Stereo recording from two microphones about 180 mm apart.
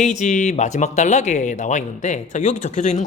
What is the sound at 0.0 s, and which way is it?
Speech, 40° left (ahead or behind).